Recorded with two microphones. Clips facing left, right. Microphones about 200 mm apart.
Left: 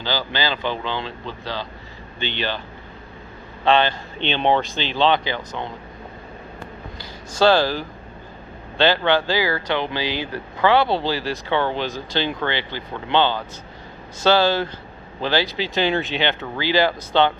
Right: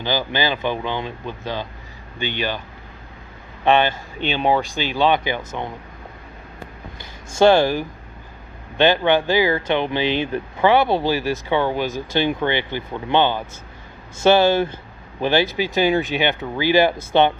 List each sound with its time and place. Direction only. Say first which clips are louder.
0.0 s speech: right 3 dB; 15° right (ahead or behind)
3.6 s speech: right 1 dB; 15° right (ahead or behind)
7.3 s speech: right 3 dB; 20° right (ahead or behind)